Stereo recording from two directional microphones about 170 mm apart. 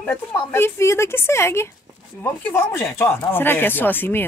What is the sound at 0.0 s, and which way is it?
Speech, 10° left (ahead or behind).